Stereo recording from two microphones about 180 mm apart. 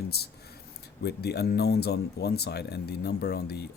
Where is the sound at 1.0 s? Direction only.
65° left (ahead or behind).